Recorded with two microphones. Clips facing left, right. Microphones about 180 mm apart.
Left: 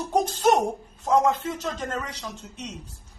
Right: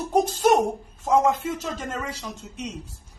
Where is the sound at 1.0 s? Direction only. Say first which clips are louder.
Right 1 dB; 10° right (ahead or behind).